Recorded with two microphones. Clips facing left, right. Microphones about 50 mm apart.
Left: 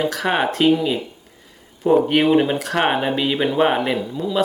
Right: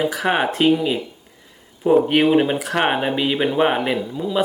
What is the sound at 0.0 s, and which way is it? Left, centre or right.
Speech, centre.